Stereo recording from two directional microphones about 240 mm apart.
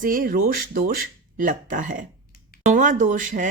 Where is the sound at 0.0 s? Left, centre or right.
Right.